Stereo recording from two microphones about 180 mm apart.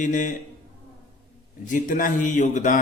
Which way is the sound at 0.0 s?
45° left (ahead or behind).